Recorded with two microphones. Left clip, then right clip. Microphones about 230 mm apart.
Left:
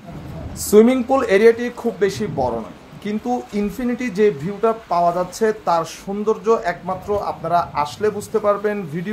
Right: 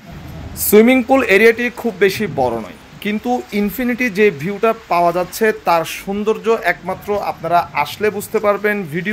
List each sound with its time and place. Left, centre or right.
0.7 s speech: right